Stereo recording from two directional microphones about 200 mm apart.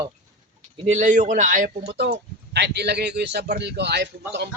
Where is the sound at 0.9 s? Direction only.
35° right (ahead or behind).